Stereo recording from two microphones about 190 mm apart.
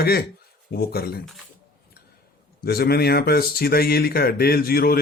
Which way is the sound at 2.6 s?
55° left (ahead or behind).